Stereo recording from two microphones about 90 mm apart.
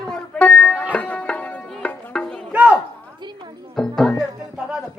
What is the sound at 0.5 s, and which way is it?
Music, 20° left (ahead or behind).